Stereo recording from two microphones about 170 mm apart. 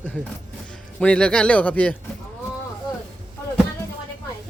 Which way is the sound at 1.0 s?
5° left (ahead or behind).